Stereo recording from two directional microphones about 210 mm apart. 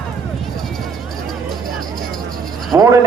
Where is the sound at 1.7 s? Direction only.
Centre (ahead or behind).